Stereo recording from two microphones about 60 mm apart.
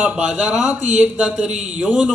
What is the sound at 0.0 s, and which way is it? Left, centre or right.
Speech, right.